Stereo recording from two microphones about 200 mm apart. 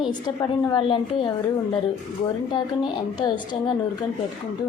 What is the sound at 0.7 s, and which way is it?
Speech, 25° left (ahead or behind).